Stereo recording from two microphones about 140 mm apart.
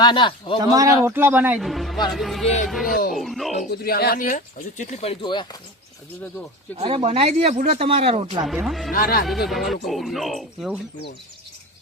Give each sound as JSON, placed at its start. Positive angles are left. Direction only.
{"t": 0.0, "sound": "a man's voice", "side_deg": 35}
{"t": 0.6, "sound": "a man's voice", "side_deg": -25}
{"t": 1.6, "sound": "music", "side_deg": 0}
{"t": 2.1, "sound": "speech", "side_deg": 0}
{"t": 3.8, "sound": "speech", "side_deg": 90}
{"t": 5.2, "sound": "a man's voice", "side_deg": 35}
{"t": 6.7, "sound": "speech", "side_deg": -45}
{"t": 8.4, "sound": "speech", "side_deg": 0}
{"t": 8.9, "sound": "speech", "side_deg": 90}
{"t": 9.2, "sound": "speech", "side_deg": 0}